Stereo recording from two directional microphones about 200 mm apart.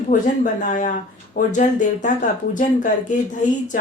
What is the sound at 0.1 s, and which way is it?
Speech, 40° left (ahead or behind).